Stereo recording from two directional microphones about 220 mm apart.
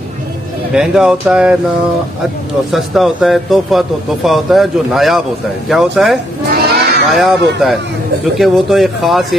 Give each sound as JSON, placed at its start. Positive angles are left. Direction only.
{"t": 0.7, "sound": "a man's voice", "side_deg": -5}
{"t": 2.7, "sound": "a man's voice", "side_deg": 0}
{"t": 6.5, "sound": "sheep", "side_deg": -45}
{"t": 7.1, "sound": "a man's voice", "side_deg": 0}
{"t": 8.4, "sound": "a man's voice", "side_deg": 0}